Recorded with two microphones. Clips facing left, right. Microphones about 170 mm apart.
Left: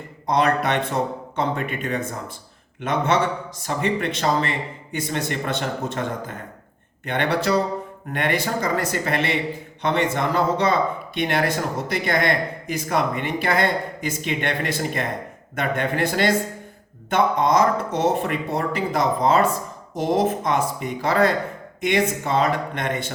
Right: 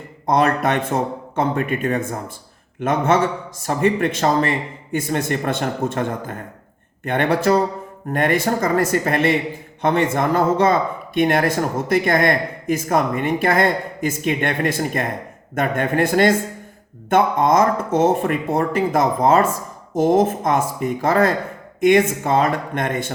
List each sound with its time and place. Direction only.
0.3 s speech: 50° right (ahead or behind)